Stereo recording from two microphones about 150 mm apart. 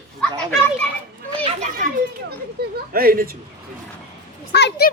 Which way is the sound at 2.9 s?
80° right.